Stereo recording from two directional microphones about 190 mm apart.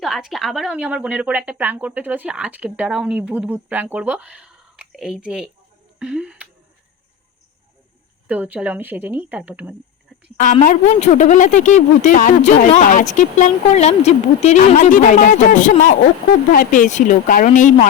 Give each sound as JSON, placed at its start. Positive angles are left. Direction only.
{"t": 0.0, "sound": "speech", "side_deg": 0}
{"t": 8.3, "sound": "speech", "side_deg": -10}
{"t": 10.3, "sound": "a woman's voice", "side_deg": 40}